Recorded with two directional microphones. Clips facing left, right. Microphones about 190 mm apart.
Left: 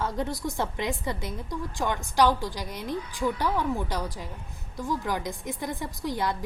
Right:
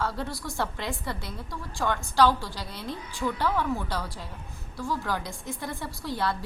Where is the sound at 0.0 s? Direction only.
20° left (ahead or behind).